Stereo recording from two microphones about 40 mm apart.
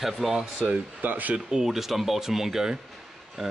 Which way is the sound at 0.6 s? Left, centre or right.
Right.